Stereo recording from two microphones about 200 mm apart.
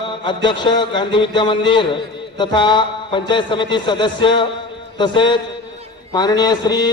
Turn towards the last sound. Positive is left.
turn(degrees=20)  # may be behind; listen again after turning